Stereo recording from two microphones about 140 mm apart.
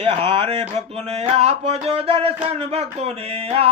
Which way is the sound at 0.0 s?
40° right (ahead or behind).